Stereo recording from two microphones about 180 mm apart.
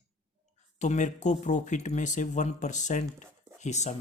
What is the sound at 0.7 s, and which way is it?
Speech, 45° left (ahead or behind).